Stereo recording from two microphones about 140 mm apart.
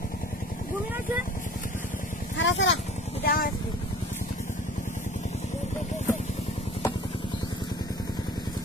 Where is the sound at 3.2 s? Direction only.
90° left.